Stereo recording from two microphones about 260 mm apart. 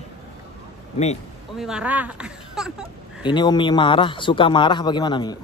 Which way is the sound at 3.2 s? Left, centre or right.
Centre.